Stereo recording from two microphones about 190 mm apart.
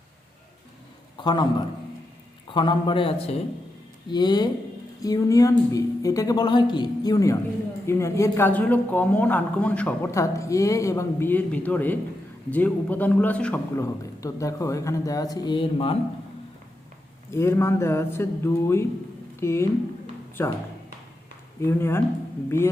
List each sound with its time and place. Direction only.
1.1 s a man's voice: 25° left (ahead or behind)
2.5 s a man's voice: 25° left (ahead or behind)
17.3 s a man's voice: 15° left (ahead or behind)
21.6 s a man's voice: 15° left (ahead or behind)